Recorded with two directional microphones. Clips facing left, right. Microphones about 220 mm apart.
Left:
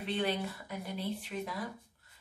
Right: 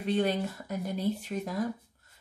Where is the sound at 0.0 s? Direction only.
45° right (ahead or behind).